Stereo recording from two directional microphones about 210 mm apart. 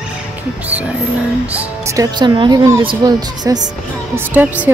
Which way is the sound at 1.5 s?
10° right (ahead or behind).